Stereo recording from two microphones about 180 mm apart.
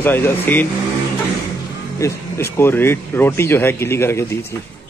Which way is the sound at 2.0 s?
15° left (ahead or behind).